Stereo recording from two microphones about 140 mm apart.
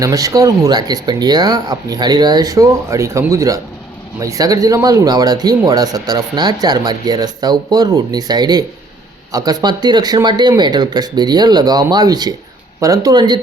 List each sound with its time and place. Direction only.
0.0 s speech: 25° right (ahead or behind)